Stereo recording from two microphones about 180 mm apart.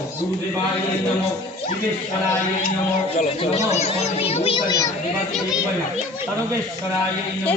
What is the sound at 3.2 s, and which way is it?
A child's voice, 40° left (ahead or behind).